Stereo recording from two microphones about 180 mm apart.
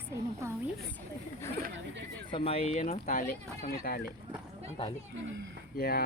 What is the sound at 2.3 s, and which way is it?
Speech, 35° left (ahead or behind).